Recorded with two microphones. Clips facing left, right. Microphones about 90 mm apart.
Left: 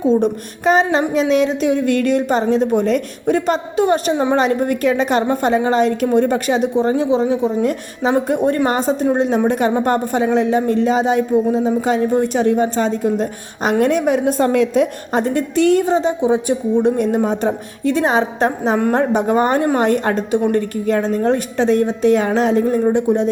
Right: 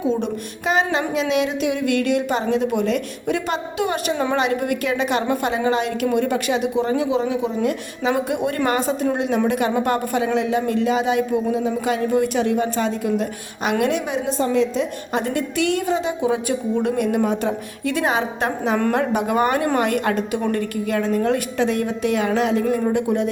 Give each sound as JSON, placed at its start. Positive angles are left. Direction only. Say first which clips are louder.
{"t": 0.2, "sound": "speech", "louder": "left 7 dB", "side_deg": 40}
{"t": 15.1, "sound": "speech", "louder": "left 3 dB", "side_deg": 35}